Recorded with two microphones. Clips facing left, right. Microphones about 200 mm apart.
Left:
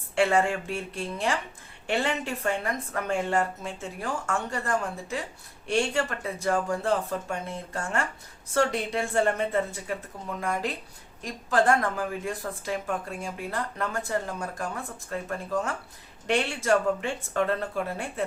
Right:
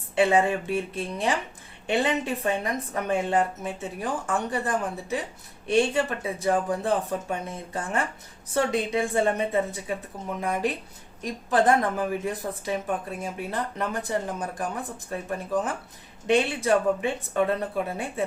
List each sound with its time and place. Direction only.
0.2 s speech: 15° right (ahead or behind)